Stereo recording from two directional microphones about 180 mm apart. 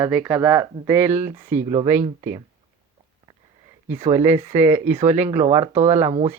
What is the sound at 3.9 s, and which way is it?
Speech, 35° right (ahead or behind).